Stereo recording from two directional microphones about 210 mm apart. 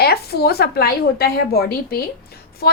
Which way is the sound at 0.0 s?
50° left (ahead or behind).